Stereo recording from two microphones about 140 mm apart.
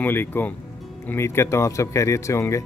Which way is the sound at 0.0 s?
15° left (ahead or behind).